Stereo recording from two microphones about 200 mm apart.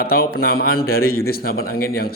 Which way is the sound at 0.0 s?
50° left (ahead or behind).